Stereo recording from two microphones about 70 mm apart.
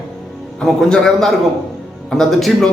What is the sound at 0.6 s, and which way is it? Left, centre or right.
A man's voice, centre.